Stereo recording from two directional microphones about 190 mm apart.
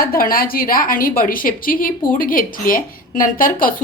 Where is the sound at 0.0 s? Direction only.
50° left (ahead or behind).